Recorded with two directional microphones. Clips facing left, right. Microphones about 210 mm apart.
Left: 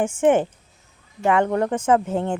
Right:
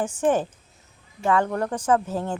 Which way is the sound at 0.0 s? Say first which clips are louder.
Left 4 dB; 25° left (ahead or behind).